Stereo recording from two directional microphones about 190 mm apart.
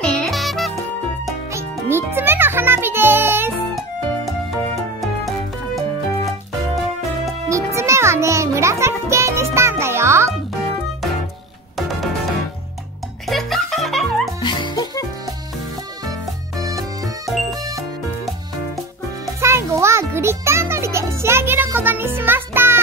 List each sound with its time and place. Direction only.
0.0 s music: centre (ahead or behind)
1.5 s music: 15° right (ahead or behind)
7.4 s music: 15° right (ahead or behind)
13.3 s music: centre (ahead or behind)
14.4 s music: 25° left (ahead or behind)
16.5 s music: 20° right (ahead or behind)
17.3 s music: centre (ahead or behind)
19.4 s music: 15° right (ahead or behind)